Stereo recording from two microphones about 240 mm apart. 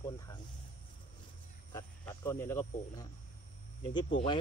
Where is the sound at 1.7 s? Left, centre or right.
Centre.